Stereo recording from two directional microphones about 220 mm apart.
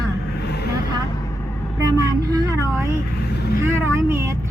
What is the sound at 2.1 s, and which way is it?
Speech, 15° right (ahead or behind).